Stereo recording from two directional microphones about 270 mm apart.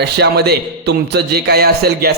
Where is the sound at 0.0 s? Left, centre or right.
Right.